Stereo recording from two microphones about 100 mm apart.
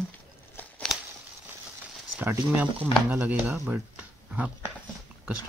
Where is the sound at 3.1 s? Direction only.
20° right (ahead or behind).